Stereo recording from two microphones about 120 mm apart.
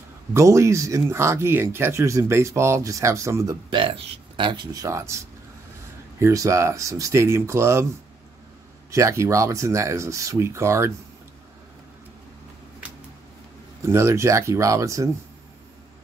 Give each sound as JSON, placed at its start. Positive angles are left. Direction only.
{"t": 0.3, "sound": "speech", "side_deg": -25}
{"t": 3.7, "sound": "speech", "side_deg": -45}
{"t": 4.7, "sound": "speech", "side_deg": -25}
{"t": 8.9, "sound": "speech", "side_deg": -25}
{"t": 13.8, "sound": "speech", "side_deg": -25}